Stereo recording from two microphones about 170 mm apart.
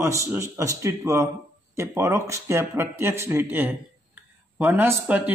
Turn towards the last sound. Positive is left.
turn(degrees=-10)  # may be behind; listen again after turning